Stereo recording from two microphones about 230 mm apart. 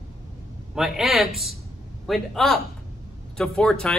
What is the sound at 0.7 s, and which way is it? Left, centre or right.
Speech, centre.